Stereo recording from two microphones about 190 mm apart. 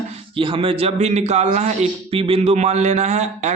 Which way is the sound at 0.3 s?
30° right (ahead or behind).